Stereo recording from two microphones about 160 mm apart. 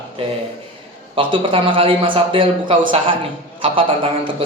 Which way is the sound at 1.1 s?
30° right (ahead or behind).